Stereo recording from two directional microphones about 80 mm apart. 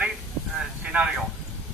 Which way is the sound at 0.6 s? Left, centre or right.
Centre.